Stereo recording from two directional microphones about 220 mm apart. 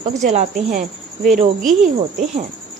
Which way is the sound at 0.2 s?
30° right (ahead or behind).